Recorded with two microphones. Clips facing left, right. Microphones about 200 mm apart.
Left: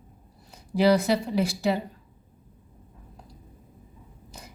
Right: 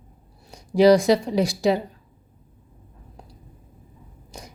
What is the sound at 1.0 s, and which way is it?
Speech, 90° right.